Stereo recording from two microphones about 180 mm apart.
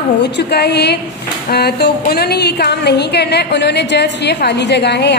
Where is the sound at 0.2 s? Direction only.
65° left (ahead or behind).